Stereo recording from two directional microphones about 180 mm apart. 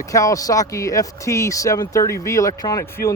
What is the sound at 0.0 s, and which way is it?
Speech, 20° left (ahead or behind).